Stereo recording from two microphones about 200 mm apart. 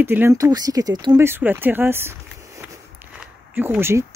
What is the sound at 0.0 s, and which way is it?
Speech, 10° right (ahead or behind).